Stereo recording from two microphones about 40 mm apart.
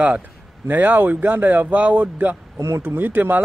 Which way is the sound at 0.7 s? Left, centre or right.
Right.